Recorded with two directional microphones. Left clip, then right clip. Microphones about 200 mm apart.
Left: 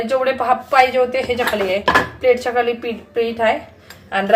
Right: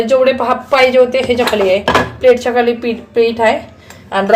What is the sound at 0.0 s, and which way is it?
A woman's voice, 10° right (ahead or behind).